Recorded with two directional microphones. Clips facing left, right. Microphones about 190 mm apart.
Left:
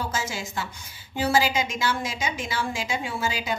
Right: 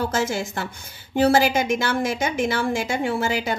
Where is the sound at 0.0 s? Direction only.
60° right (ahead or behind).